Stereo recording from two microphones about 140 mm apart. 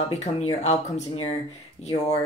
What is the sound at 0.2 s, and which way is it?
Speech, 50° left (ahead or behind).